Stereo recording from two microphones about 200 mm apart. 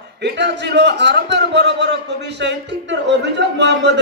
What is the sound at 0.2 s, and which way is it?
A man's voice, 60° right (ahead or behind).